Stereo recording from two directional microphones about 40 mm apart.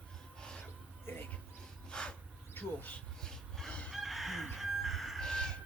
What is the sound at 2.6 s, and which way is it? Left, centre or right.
Bee, left.